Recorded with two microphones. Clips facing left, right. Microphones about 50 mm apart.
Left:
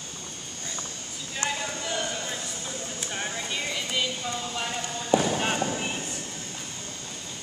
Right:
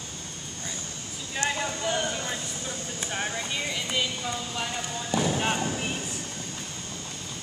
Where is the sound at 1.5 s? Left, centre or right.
Centre.